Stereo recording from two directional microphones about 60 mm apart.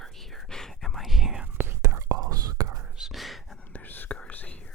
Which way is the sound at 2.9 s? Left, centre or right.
Centre.